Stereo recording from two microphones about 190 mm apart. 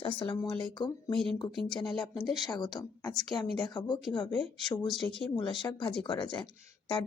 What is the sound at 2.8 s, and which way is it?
Speech, 15° left (ahead or behind).